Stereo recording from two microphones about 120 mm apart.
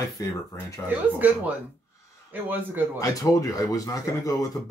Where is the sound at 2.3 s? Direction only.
15° right (ahead or behind).